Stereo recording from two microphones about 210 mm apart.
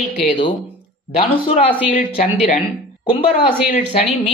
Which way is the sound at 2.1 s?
35° left (ahead or behind).